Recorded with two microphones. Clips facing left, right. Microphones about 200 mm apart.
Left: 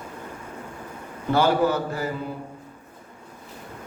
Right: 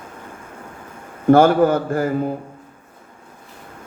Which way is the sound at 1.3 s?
50° right (ahead or behind).